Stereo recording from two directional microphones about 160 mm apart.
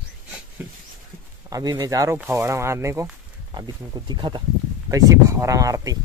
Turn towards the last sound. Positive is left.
turn(degrees=-20)  # may be behind; listen again after turning